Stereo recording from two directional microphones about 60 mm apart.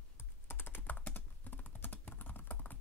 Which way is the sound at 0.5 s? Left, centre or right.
Left.